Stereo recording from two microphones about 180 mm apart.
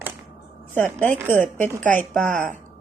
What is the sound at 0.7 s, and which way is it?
A woman's voice, 10° left (ahead or behind).